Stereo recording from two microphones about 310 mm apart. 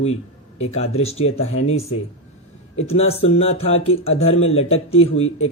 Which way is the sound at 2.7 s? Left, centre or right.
Centre.